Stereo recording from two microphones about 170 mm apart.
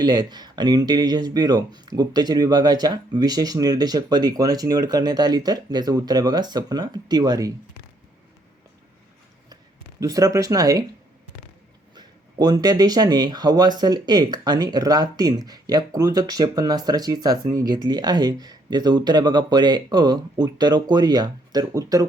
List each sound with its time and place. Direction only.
0.0 s speech: 25° right (ahead or behind)
10.0 s speech: 20° right (ahead or behind)
11.9 s speech: 25° right (ahead or behind)